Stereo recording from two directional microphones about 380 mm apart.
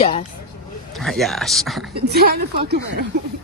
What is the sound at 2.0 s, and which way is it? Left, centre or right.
Speech, right.